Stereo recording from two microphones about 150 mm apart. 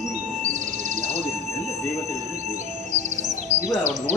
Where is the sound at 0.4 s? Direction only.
55° right (ahead or behind).